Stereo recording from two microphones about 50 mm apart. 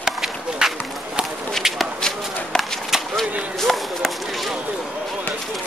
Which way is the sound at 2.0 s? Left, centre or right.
Centre.